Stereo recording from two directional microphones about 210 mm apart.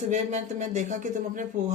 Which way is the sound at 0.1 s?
35° right (ahead or behind).